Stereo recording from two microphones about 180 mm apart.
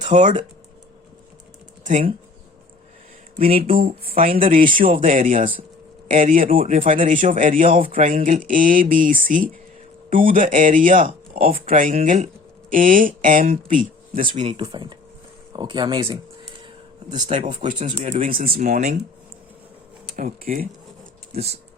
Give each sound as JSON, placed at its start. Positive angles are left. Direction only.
{"t": 0.1, "sound": "speech", "side_deg": -45}
{"t": 1.8, "sound": "speech", "side_deg": -45}
{"t": 3.3, "sound": "speech", "side_deg": -35}
{"t": 3.6, "sound": "speech", "side_deg": -55}
{"t": 14.3, "sound": "speech", "side_deg": -35}
{"t": 17.2, "sound": "speech", "side_deg": -30}
{"t": 17.7, "sound": "speech", "side_deg": -45}
{"t": 20.1, "sound": "speech", "side_deg": -50}
{"t": 21.3, "sound": "speech", "side_deg": -35}